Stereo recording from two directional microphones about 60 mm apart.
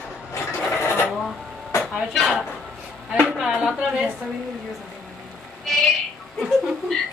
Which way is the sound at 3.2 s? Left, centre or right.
Centre.